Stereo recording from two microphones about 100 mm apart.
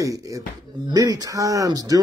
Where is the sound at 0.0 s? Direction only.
35° right (ahead or behind).